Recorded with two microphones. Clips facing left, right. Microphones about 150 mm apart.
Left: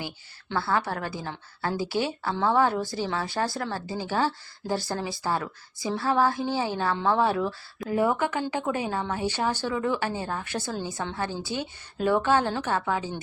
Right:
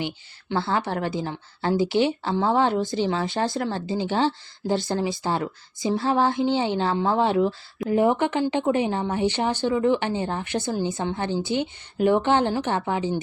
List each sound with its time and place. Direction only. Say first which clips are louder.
0.5 s a woman's voice: right 2 dB; 20° right (ahead or behind)